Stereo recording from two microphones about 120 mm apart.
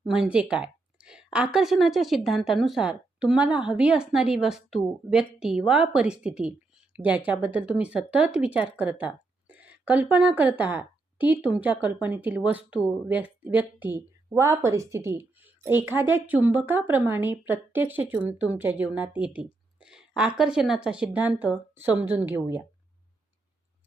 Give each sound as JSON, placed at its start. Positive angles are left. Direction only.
{"t": 0.0, "sound": "speech", "side_deg": -5}